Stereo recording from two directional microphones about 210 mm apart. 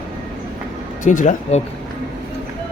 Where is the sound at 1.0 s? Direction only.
35° left (ahead or behind).